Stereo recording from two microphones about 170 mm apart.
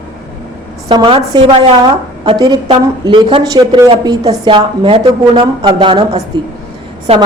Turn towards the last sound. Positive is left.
turn(degrees=-35)  # may be behind; listen again after turning